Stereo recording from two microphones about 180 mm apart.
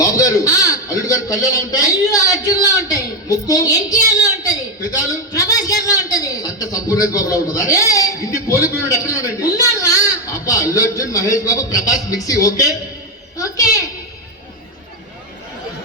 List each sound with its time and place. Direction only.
0.0 s a man's voice: 20° left (ahead or behind)